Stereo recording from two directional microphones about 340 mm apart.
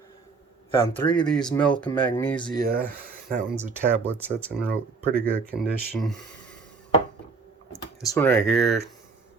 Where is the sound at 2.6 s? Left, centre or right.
Right.